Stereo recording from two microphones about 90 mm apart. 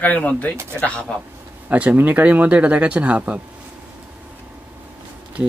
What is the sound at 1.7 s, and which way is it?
Speech, 20° right (ahead or behind).